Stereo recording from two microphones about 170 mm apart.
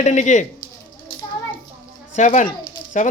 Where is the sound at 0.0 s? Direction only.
45° left (ahead or behind).